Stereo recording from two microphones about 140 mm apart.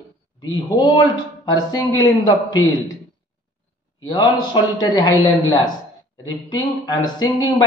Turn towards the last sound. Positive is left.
turn(degrees=25)  # may be behind; listen again after turning